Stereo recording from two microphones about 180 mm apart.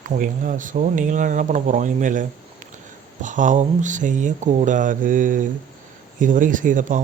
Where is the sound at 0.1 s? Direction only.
45° right (ahead or behind).